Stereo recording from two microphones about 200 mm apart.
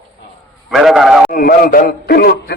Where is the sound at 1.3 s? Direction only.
45° left (ahead or behind).